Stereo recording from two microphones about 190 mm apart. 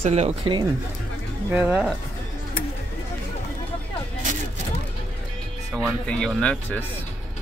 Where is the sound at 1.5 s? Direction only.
5° right (ahead or behind).